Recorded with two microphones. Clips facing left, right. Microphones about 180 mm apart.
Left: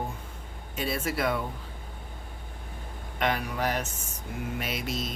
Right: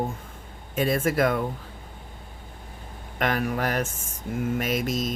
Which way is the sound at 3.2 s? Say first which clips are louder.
Right 3 dB; 50° right (ahead or behind).